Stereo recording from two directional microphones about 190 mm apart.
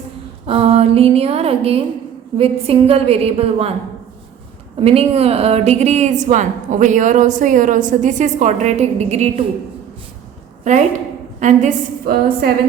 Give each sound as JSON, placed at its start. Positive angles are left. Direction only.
{"t": 0.4, "sound": "a sound", "side_deg": -30}
{"t": 2.4, "sound": "a woman's voice", "side_deg": -30}
{"t": 4.8, "sound": "a woman's voice", "side_deg": -30}
{"t": 10.6, "sound": "a woman's voice", "side_deg": -40}